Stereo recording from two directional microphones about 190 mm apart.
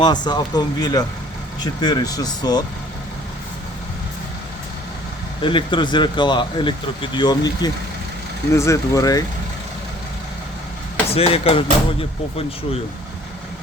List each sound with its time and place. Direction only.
0.0 s speech: 20° left (ahead or behind)
5.4 s speech: 25° left (ahead or behind)
11.1 s speech: 30° left (ahead or behind)